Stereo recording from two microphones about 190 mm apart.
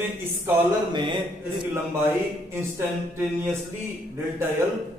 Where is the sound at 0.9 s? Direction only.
25° right (ahead or behind).